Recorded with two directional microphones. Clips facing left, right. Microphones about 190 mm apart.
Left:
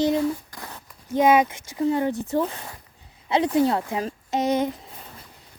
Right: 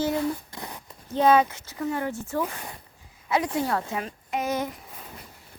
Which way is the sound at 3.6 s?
20° left (ahead or behind).